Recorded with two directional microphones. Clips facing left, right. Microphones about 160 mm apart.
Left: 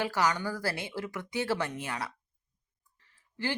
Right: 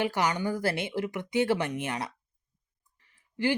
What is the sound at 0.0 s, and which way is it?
A woman's voice, 20° right (ahead or behind).